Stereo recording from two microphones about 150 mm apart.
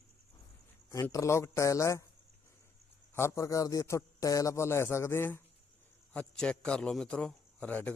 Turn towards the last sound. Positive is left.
turn(degrees=10)  # may be behind; listen again after turning